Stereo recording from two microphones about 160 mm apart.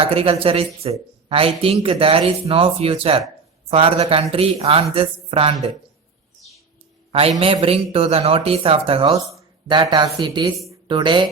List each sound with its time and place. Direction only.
0.0 s speech: 35° right (ahead or behind)
7.1 s speech: 40° right (ahead or behind)